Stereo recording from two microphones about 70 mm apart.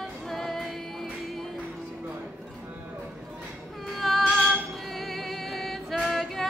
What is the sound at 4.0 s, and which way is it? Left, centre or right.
Female singing, centre.